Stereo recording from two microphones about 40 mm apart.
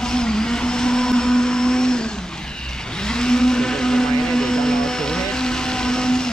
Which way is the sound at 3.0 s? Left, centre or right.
Centre.